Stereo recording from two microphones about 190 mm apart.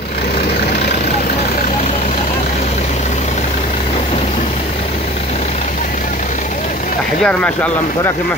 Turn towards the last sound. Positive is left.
turn(degrees=5)  # may be behind; listen again after turning